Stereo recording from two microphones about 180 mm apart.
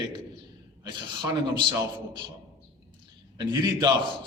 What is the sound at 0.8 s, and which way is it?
Speech, 25° right (ahead or behind).